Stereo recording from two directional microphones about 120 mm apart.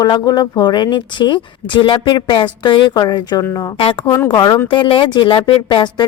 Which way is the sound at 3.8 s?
50° left (ahead or behind).